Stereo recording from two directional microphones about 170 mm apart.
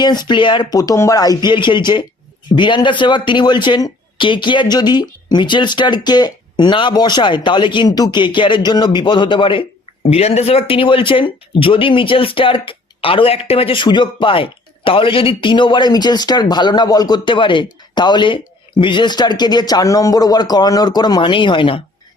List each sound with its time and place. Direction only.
0.0 s speech: 25° left (ahead or behind)